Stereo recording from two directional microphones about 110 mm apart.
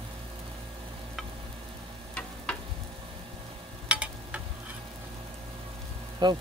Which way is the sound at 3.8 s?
10° right (ahead or behind).